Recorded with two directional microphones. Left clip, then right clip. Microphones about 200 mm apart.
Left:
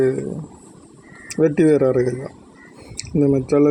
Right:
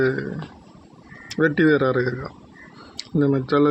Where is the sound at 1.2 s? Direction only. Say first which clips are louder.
Left 3 dB; 10° left (ahead or behind).